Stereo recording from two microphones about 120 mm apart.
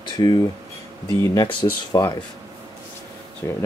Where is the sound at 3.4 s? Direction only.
20° left (ahead or behind).